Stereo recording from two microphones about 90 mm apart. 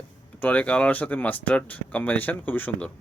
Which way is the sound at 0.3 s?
15° left (ahead or behind).